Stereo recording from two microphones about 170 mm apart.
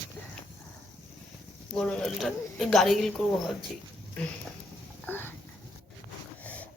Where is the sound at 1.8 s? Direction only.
5° left (ahead or behind).